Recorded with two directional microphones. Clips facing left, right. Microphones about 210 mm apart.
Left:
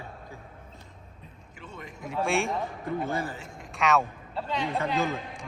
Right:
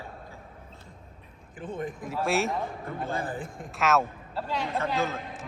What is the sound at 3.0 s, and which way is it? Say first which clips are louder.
Speech: even; 55° right (ahead or behind).